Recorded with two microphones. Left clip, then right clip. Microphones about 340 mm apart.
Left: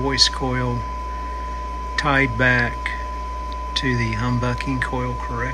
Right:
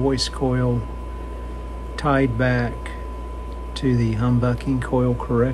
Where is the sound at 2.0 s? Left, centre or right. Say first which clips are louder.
Left 2 dB; centre.